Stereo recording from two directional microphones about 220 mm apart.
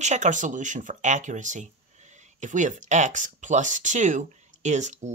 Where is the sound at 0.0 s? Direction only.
35° right (ahead or behind).